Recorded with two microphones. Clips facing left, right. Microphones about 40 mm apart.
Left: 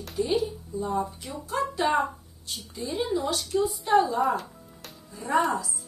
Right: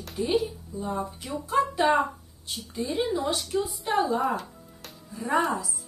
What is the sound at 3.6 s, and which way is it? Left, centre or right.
A woman's voice, centre.